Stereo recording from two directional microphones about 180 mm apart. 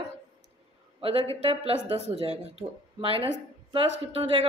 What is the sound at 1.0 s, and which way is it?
A woman's voice, 35° right (ahead or behind).